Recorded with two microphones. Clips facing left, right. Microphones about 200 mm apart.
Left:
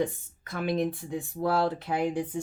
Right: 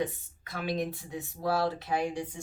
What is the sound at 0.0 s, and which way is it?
Speech, 50° left (ahead or behind).